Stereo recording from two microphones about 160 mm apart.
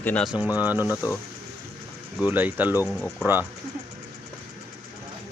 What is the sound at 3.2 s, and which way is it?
Speech, 10° right (ahead or behind).